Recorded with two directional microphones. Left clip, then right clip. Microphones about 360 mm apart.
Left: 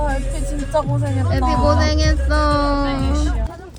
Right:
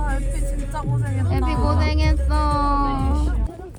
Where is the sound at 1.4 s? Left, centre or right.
Centre.